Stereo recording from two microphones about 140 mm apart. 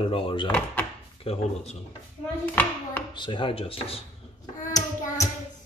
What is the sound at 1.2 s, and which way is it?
Speech, 45° left (ahead or behind).